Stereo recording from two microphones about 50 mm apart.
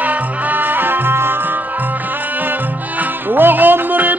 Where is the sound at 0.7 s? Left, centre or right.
Right.